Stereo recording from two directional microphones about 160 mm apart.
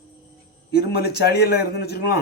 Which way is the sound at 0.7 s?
80° left.